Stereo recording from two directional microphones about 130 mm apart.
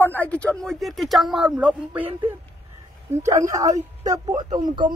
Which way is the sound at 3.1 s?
25° right (ahead or behind).